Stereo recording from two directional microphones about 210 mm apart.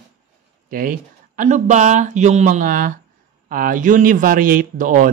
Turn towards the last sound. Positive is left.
turn(degrees=-40)  # may be behind; listen again after turning